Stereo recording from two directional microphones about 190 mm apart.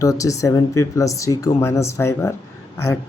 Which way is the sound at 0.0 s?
15° left (ahead or behind).